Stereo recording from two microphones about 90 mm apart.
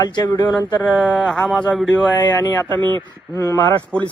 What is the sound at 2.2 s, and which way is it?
Speech, 55° left (ahead or behind).